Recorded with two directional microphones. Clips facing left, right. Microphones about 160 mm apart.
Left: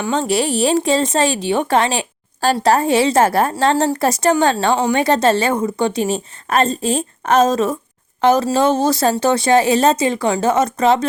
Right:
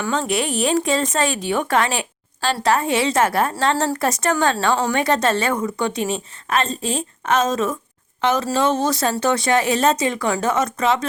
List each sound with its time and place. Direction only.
0.1 s a woman's voice: 35° left (ahead or behind)
2.4 s a woman's voice: 40° left (ahead or behind)